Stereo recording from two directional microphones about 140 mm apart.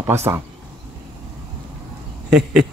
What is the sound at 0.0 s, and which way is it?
Speech, 20° right (ahead or behind).